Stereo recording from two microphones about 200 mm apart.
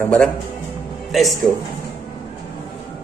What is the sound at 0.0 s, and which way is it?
Speech, 5° left (ahead or behind).